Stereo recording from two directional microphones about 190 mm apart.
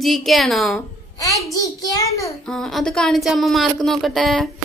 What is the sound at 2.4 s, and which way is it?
Speech, 5° left (ahead or behind).